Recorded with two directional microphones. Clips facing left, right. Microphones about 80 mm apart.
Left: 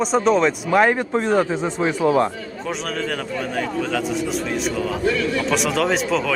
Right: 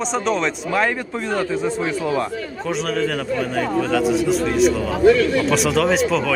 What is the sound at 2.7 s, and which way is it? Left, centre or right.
A man's voice, centre.